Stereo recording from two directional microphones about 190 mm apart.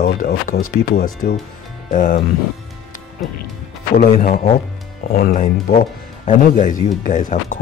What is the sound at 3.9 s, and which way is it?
Speech, 40° left (ahead or behind).